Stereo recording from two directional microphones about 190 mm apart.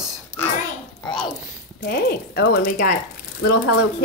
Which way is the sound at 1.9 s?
60° left (ahead or behind).